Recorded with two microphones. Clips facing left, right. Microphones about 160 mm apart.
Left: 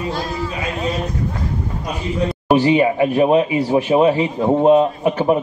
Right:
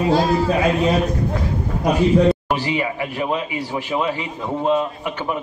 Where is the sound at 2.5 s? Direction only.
25° left (ahead or behind).